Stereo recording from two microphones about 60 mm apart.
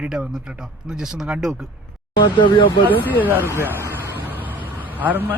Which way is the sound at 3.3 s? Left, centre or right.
Right.